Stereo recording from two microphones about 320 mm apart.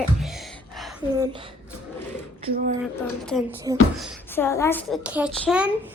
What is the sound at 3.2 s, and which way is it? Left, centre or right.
A child's voice, centre.